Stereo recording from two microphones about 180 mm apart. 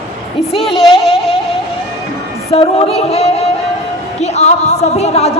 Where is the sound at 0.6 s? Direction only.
Centre (ahead or behind).